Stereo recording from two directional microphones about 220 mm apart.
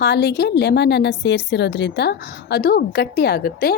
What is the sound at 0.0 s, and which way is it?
A woman's voice, 45° left (ahead or behind).